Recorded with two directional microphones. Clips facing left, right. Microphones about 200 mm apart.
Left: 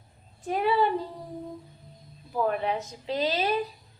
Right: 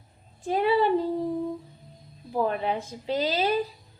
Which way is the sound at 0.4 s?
25° right (ahead or behind).